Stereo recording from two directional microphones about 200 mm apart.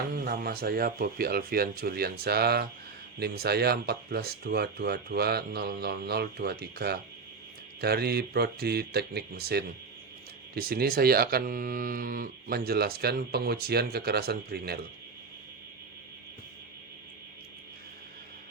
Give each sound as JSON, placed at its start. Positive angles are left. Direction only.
{"t": 0.3, "sound": "speech", "side_deg": -50}